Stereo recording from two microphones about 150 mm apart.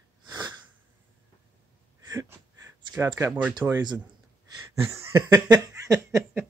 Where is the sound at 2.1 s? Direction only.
20° right (ahead or behind).